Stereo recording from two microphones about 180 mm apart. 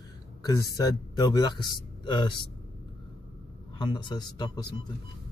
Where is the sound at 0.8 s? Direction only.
20° left (ahead or behind).